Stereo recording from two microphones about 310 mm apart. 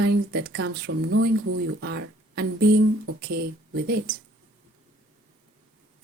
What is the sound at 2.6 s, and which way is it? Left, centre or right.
Speech, right.